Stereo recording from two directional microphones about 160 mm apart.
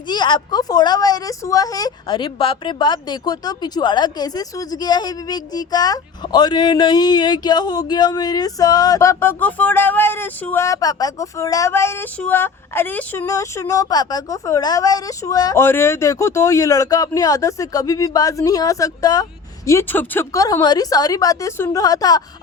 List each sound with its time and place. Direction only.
0.1 s a woman's voice: 30° left (ahead or behind)